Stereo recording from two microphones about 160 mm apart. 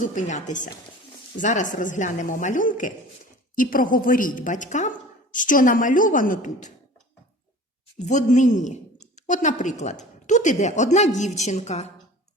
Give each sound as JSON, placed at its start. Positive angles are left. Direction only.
{"t": 0.0, "sound": "a woman's voice", "side_deg": 50}
{"t": 8.0, "sound": "a woman's voice", "side_deg": 50}